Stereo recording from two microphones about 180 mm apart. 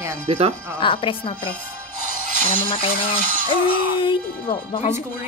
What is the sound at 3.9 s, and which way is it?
Speech, 30° left (ahead or behind).